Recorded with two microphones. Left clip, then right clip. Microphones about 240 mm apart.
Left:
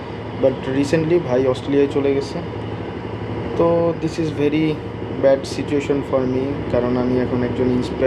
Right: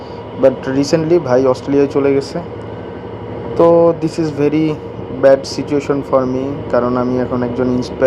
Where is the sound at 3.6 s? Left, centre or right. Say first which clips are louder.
Right 8 dB; right.